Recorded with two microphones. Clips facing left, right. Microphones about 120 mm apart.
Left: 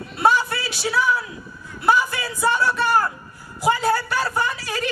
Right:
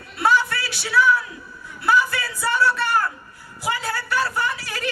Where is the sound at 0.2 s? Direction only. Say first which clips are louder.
Left 1 dB; 20° left (ahead or behind).